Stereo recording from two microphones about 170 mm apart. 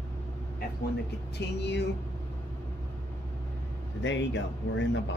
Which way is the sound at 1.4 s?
90° left.